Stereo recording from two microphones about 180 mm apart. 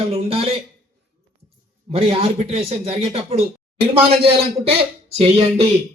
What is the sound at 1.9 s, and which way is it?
Speech, 30° right (ahead or behind).